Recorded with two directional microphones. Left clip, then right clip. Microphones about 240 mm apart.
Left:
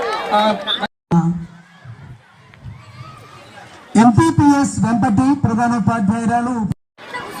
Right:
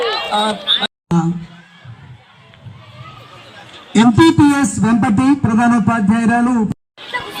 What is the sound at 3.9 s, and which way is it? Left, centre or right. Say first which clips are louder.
Speech: right 2 dB; left.